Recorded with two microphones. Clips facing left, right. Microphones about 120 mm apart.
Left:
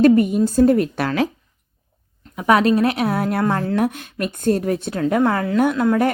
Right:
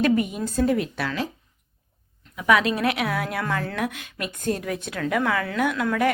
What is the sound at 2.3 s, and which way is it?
A woman's voice, 40° left (ahead or behind).